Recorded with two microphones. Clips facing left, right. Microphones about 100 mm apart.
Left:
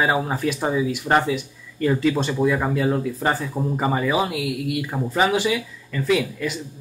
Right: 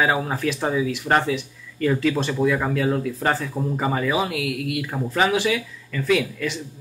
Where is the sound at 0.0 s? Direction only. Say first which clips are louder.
Even; 10° left (ahead or behind).